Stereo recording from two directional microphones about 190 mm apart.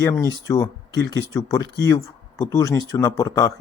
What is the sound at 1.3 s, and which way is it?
Speech, 20° left (ahead or behind).